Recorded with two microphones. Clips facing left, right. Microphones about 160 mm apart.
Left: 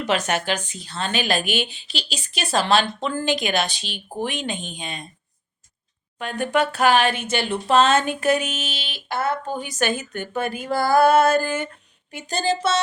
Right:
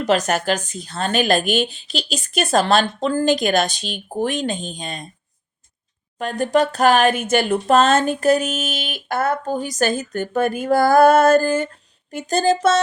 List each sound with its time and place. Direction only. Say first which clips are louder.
0.0 s speech: right 4 dB; 40° right (ahead or behind)
6.1 s speech: right 4 dB; 40° right (ahead or behind)